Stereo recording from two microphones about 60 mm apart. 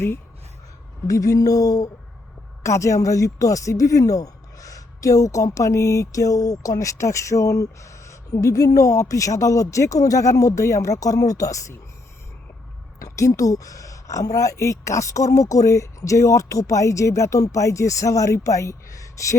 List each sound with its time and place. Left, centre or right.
1.0 s speech: left
2.6 s speech: left
13.0 s speech: left